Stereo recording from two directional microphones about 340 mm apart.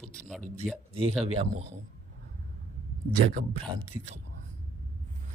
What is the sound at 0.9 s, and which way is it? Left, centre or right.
Speech, centre.